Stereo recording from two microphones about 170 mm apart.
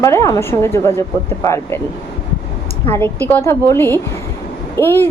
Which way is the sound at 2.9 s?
10° left (ahead or behind).